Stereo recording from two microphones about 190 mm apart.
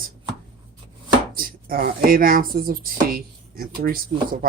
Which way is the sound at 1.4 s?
50° right (ahead or behind).